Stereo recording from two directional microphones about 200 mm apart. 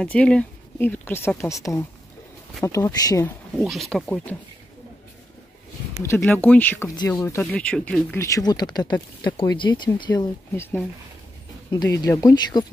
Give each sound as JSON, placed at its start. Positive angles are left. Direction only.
{"t": 0.0, "sound": "a woman's voice", "side_deg": 5}
{"t": 3.6, "sound": "speech", "side_deg": 0}
{"t": 6.0, "sound": "a woman's voice", "side_deg": 10}
{"t": 8.4, "sound": "speech", "side_deg": 20}
{"t": 11.7, "sound": "a woman's voice", "side_deg": 15}